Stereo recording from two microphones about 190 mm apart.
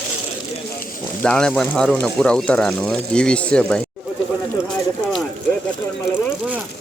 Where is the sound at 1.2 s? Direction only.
5° left (ahead or behind).